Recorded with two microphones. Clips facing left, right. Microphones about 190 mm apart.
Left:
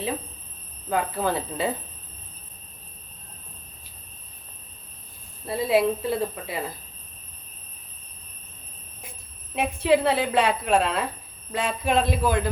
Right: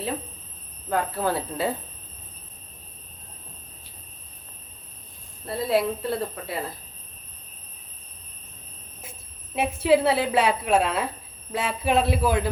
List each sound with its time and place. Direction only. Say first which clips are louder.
0.9 s speech: even; centre (ahead or behind)
5.5 s speech: left 2 dB; centre (ahead or behind)
9.6 s a woman's voice: right 1 dB; 5° right (ahead or behind)